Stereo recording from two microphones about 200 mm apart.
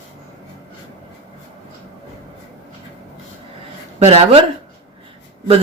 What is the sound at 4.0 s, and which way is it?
Speech, 30° right (ahead or behind).